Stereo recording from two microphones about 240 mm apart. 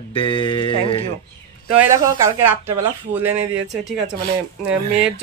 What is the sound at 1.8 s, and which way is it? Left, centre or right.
Speech, centre.